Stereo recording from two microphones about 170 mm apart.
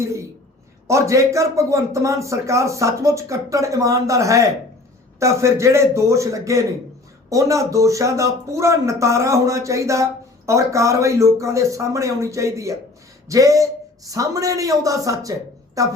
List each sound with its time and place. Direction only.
0.9 s a man's voice: 15° right (ahead or behind)